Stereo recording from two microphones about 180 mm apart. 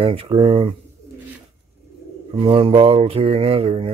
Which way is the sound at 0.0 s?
30° right (ahead or behind).